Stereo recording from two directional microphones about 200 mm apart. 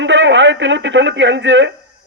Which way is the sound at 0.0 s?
65° right (ahead or behind).